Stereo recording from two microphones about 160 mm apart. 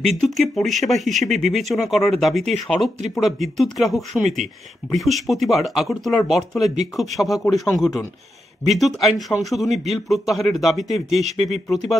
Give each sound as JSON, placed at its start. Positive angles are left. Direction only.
{"t": 0.2, "sound": "speech", "side_deg": 0}